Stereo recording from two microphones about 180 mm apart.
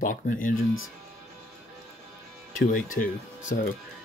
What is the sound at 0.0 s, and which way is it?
Speech, 50° left (ahead or behind).